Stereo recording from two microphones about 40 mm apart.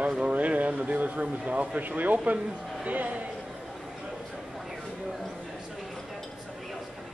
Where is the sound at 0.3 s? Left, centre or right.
Right.